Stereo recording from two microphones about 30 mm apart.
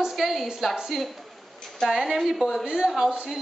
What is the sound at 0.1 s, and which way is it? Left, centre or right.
A woman's voice, centre.